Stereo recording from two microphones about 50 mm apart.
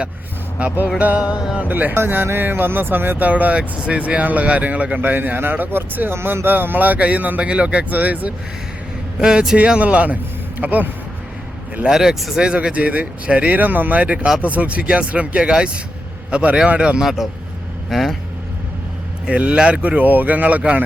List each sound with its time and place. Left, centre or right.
0.6 s speech: right
1.5 s speech: right
2.2 s speech: right
3.2 s speech: right
4.9 s speech: right
9.1 s speech: centre; by 10.8 s right
11.9 s speech: centre
12.5 s speech: right
17.0 s speech: centre
19.2 s speech: right
20.0 s speech: right